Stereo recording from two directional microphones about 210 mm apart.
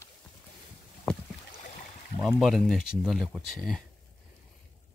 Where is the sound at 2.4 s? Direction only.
Centre (ahead or behind).